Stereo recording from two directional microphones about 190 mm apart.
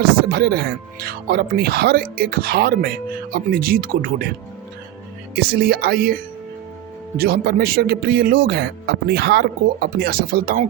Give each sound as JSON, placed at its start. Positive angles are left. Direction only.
{"t": 0.3, "sound": "speech", "side_deg": -55}
{"t": 5.3, "sound": "speech", "side_deg": -55}
{"t": 7.2, "sound": "speech", "side_deg": -55}